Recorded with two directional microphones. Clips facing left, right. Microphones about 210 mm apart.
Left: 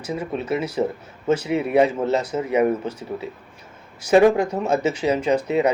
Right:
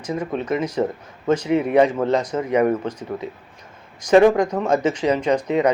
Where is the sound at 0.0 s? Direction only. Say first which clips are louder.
Right 2 dB; 10° left (ahead or behind).